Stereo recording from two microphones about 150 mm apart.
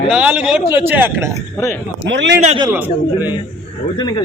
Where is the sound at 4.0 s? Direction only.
25° left (ahead or behind).